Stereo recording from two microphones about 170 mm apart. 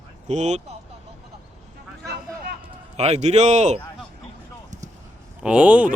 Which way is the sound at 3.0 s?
40° right (ahead or behind).